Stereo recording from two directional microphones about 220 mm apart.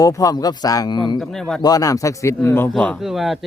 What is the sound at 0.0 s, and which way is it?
A man's voice, 15° left (ahead or behind).